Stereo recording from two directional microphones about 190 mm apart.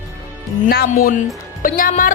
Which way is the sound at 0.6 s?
50° left (ahead or behind).